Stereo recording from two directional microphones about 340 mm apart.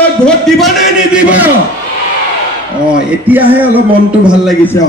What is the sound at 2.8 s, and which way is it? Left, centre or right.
Speech, centre.